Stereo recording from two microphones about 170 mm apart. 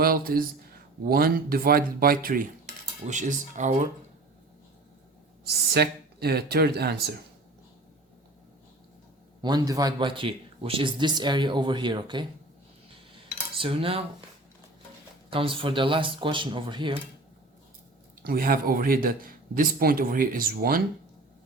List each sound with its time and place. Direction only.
0.0 s speech: 60° right (ahead or behind)
3.0 s speech: 45° right (ahead or behind)
5.7 s speech: 70° right (ahead or behind)
9.4 s a man's voice: 25° right (ahead or behind)
13.6 s cutlery: 30° right (ahead or behind)
15.3 s a man's voice: 30° right (ahead or behind)
18.2 s speech: 55° right (ahead or behind)